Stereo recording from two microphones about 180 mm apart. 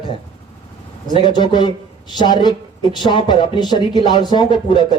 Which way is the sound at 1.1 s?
25° left (ahead or behind).